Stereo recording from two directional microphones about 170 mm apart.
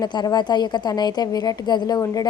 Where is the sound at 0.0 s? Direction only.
25° left (ahead or behind).